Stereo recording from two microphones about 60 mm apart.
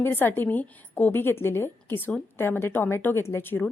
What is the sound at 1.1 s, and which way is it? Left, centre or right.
A woman's voice, left.